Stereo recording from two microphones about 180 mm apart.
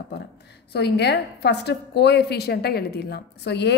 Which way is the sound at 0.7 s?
65° left (ahead or behind).